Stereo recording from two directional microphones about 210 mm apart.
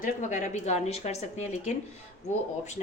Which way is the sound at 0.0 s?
35° left (ahead or behind).